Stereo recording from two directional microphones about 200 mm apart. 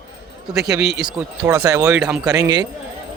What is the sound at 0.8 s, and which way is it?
Speech, 55° right (ahead or behind).